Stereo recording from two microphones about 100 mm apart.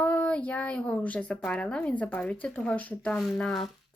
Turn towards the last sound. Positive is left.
turn(degrees=5)  # may be behind; listen again after turning